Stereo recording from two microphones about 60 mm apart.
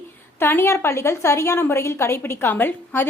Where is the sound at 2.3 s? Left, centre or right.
Left.